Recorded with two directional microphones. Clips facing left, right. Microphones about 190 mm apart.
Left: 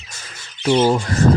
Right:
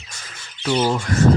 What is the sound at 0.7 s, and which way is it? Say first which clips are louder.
Speech: left 4 dB; 25° left (ahead or behind).